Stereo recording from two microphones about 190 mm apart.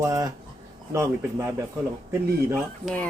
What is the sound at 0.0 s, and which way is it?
Speech, 15° right (ahead or behind).